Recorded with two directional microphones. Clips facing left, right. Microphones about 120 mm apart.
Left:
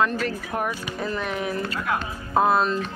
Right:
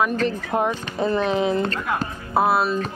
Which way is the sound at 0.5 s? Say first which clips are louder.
Right 5 dB; 20° right (ahead or behind).